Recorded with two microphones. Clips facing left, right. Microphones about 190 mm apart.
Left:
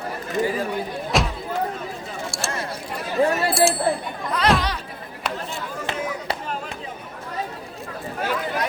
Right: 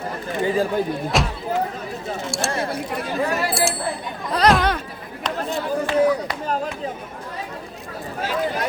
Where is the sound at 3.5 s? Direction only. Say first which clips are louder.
Left 3 dB; centre (ahead or behind).